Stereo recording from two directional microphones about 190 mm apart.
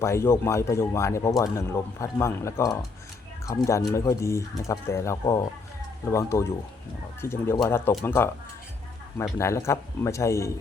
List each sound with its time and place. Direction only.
0.0 s speech: 15° left (ahead or behind)